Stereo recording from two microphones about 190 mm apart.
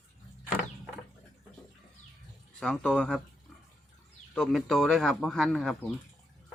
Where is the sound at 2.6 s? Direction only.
5° left (ahead or behind).